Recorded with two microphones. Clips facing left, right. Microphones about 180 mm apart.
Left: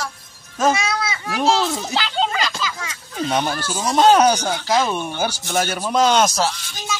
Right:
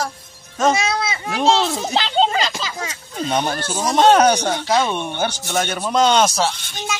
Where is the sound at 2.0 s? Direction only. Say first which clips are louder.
Right 5 dB; 30° right (ahead or behind).